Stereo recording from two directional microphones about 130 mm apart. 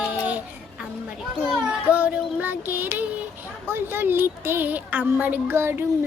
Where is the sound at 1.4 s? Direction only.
10° right (ahead or behind).